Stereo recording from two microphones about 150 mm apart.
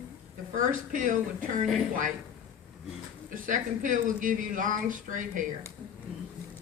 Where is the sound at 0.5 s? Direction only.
60° right (ahead or behind).